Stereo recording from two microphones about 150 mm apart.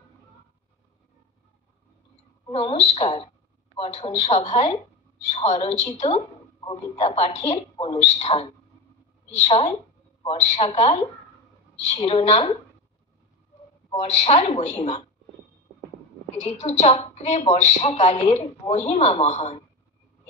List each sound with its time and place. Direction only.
2.5 s a woman's voice: 40° left (ahead or behind)
13.9 s a woman's voice: 50° left (ahead or behind)
16.3 s a woman's voice: 50° left (ahead or behind)